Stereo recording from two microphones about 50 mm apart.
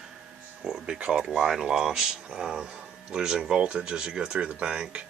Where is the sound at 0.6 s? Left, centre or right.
Centre.